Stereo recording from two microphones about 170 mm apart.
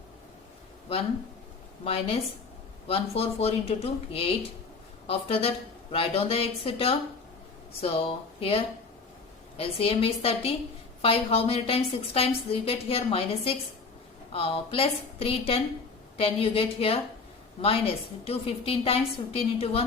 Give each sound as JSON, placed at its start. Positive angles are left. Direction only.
{"t": 1.8, "sound": "a woman's voice", "side_deg": 35}